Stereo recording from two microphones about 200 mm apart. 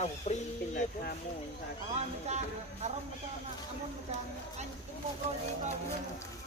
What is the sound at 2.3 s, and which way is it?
Speech, 35° right (ahead or behind).